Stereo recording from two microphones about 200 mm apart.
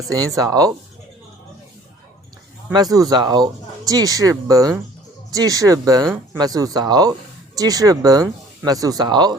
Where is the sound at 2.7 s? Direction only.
20° right (ahead or behind).